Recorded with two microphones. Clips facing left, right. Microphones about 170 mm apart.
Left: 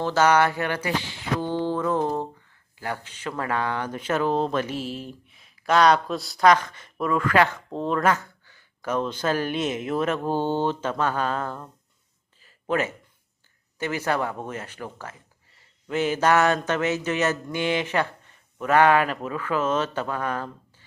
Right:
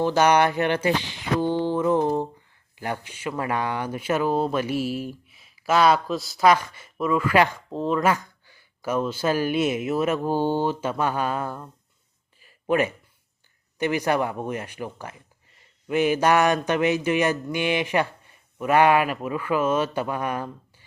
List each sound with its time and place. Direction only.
0.0 s speech: 15° right (ahead or behind)
7.7 s speech: centre (ahead or behind)
12.4 s a sound: 15° right (ahead or behind)
13.7 s speech: 15° right (ahead or behind)